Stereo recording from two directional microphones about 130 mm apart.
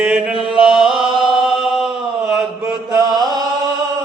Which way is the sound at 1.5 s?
Centre (ahead or behind).